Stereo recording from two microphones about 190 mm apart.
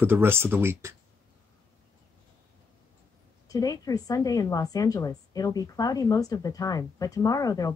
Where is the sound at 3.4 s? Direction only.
20° left (ahead or behind).